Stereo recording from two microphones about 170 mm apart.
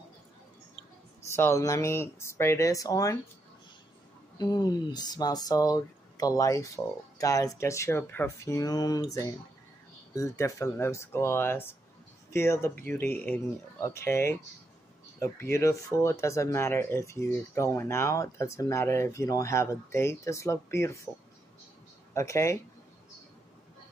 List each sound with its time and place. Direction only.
1.3 s speech: 15° left (ahead or behind)
4.4 s speech: 25° left (ahead or behind)
22.1 s speech: 15° left (ahead or behind)